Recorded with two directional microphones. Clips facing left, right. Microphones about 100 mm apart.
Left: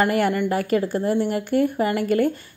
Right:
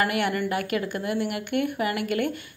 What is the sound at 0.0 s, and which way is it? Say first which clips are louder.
Speech: left 5 dB; 35° left (ahead or behind).